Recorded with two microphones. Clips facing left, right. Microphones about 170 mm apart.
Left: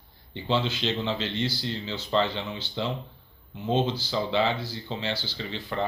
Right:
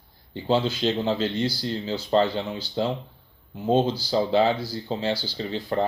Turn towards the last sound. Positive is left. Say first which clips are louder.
# right 5 dB
turn(degrees=-40)  # may be behind; listen again after turning